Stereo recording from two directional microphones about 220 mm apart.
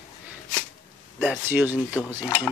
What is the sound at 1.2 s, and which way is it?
Speech, 5° right (ahead or behind).